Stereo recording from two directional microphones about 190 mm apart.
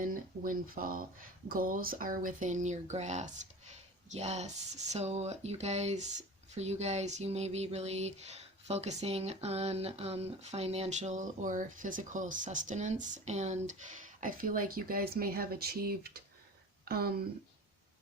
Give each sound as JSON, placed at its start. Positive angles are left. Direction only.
{"t": 0.0, "sound": "speech", "side_deg": -45}